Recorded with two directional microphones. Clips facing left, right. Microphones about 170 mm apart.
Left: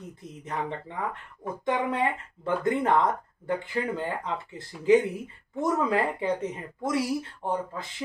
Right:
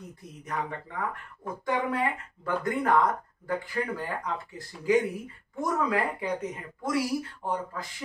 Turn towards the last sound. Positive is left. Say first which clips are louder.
# left 2 dB
turn(degrees=25)  # may be behind; listen again after turning